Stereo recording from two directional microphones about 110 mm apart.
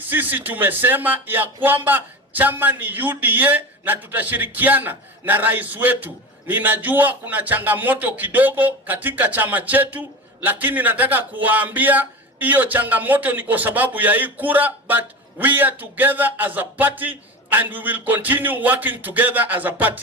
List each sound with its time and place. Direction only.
0.0 s a man's voice: 15° right (ahead or behind)